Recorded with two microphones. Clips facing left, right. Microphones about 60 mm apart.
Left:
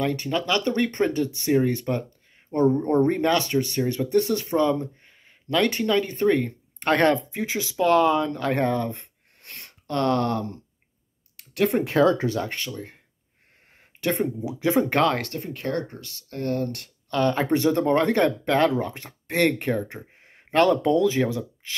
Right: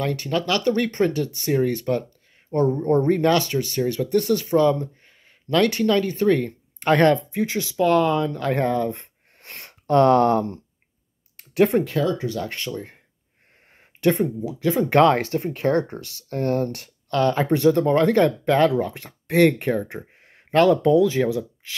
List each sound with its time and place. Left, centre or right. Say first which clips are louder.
0.1 s speech: right 1 dB; centre
6.8 s speech: right 3 dB; centre
9.4 s a sound: right 3 dB; right
9.8 s speech: right 7 dB; right
11.9 s speech: left 4 dB; left
12.7 s speech: right 5 dB; centre
14.2 s speech: right 2 dB; centre
14.9 s speech: right 6 dB; centre
15.3 s speech: right 7 dB; right
16.0 s speech: right 3 dB; left
16.3 s speech: right 4 dB; right
17.1 s speech: right 2 dB; centre